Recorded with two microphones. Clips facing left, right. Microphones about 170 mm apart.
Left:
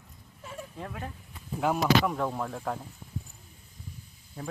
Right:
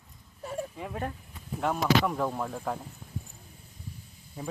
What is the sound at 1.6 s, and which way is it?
Speech, 5° left (ahead or behind).